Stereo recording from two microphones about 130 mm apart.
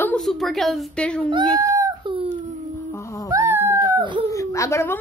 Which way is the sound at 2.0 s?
40° right (ahead or behind).